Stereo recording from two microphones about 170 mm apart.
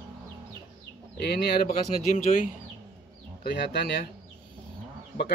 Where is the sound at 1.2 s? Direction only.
70° left (ahead or behind).